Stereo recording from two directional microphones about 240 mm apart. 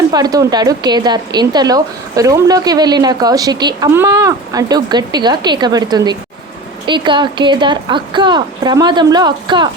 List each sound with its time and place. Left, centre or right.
0.1 s a woman's voice: centre